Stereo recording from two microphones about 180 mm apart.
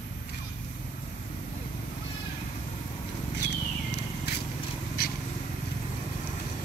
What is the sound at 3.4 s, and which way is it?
Cat, 70° left (ahead or behind).